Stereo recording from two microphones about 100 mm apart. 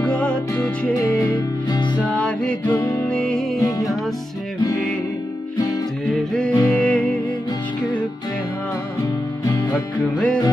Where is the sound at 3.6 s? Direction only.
35° left (ahead or behind).